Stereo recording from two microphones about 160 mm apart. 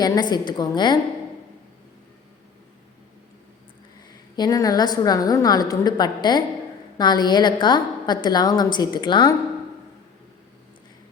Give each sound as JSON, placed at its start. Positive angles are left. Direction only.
{"t": 0.0, "sound": "a woman's voice", "side_deg": 25}
{"t": 4.4, "sound": "a woman's voice", "side_deg": 20}